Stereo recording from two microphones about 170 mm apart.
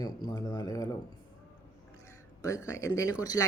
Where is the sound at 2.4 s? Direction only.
20° left (ahead or behind).